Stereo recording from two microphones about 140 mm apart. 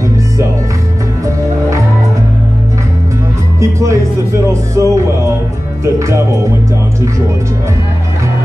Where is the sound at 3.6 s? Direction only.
20° right (ahead or behind).